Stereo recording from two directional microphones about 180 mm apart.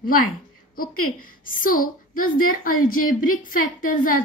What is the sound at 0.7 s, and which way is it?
A woman's voice, 50° left (ahead or behind).